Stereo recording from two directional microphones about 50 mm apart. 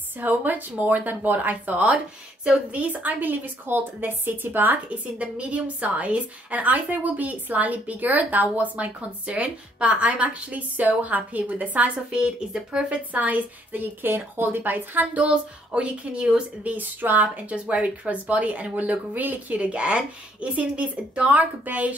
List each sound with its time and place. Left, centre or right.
0.2 s a woman's voice: right; by 13.0 s centre
13.1 s a woman's voice: right
15.2 s a woman's voice: right
16.7 s a woman's voice: right